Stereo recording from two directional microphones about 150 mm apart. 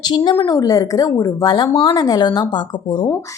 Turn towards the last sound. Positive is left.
turn(degrees=30)  # may be behind; listen again after turning